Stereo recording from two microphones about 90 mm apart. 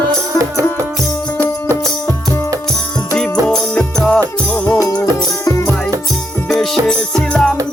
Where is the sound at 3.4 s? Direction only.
10° left (ahead or behind).